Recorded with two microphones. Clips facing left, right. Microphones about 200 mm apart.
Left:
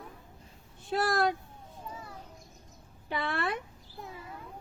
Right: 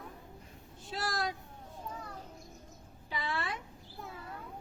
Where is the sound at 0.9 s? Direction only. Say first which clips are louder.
Left 8 dB; 60° left (ahead or behind).